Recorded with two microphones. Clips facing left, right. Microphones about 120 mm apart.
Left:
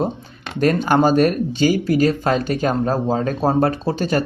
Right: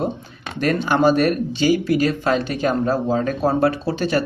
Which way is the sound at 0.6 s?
45° left (ahead or behind).